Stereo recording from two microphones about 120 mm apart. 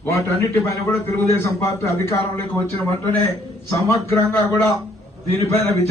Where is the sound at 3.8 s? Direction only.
25° left (ahead or behind).